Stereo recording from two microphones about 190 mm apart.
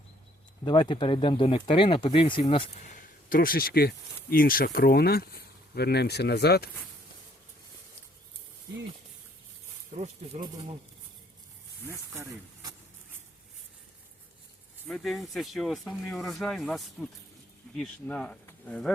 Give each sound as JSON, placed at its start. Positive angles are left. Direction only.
{"t": 0.6, "sound": "speech", "side_deg": 25}
{"t": 3.2, "sound": "speech", "side_deg": 50}
{"t": 14.8, "sound": "speech", "side_deg": 0}